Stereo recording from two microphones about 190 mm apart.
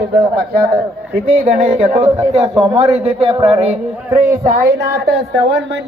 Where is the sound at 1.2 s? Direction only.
45° right (ahead or behind).